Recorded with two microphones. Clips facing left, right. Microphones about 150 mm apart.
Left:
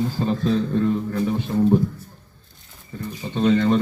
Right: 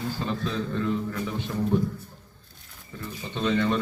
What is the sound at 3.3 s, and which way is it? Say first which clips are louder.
Speech: left 7 dB; 40° left (ahead or behind).